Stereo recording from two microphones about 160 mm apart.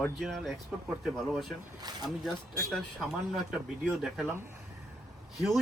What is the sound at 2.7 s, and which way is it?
Speech, centre (ahead or behind).